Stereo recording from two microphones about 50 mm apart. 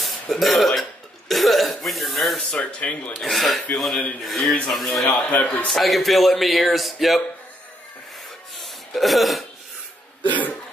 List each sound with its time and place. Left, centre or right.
0.0 s speech: centre
2.6 s speech: left
3.2 s speech: centre
5.2 s speech: left
5.7 s speech: centre
8.5 s a sound: centre